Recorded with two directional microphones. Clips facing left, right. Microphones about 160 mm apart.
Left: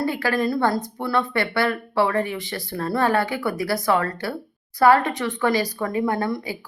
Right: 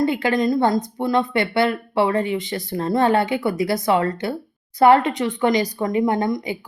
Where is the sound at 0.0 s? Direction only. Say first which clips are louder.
Right 3 dB; 20° right (ahead or behind).